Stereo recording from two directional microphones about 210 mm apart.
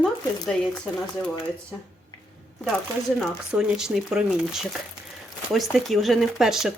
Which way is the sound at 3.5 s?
5° right (ahead or behind).